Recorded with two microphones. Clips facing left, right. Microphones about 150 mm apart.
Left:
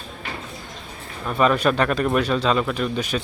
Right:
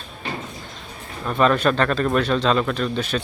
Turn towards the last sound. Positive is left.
turn(degrees=10)  # may be behind; listen again after turning